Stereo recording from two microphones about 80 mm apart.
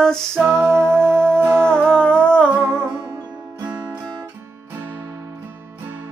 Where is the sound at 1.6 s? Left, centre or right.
Centre.